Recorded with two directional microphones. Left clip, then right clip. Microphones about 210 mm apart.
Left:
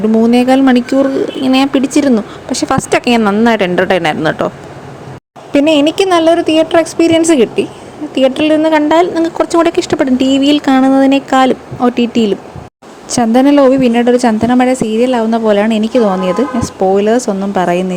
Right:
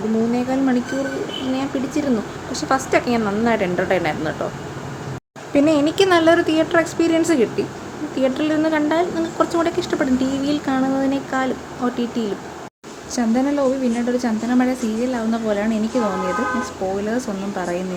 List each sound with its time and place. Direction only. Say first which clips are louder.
0.3 s a woman's voice: left 11 dB; 45° left (ahead or behind)
5.5 s a woman's voice: left 7 dB; 35° left (ahead or behind)